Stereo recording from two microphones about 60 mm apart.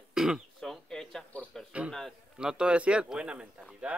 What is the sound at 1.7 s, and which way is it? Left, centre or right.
A man's voice, centre.